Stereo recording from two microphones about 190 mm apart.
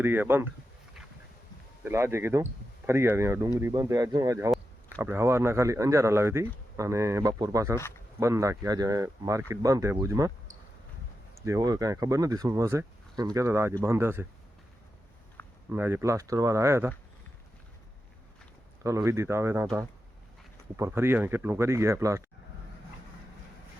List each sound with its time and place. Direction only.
0.0 s speech: 10° right (ahead or behind)
1.8 s speech: 15° right (ahead or behind)
11.4 s speech: 15° right (ahead or behind)
15.7 s speech: 10° right (ahead or behind)
18.8 s speech: 15° right (ahead or behind)
20.7 s speech: 15° right (ahead or behind)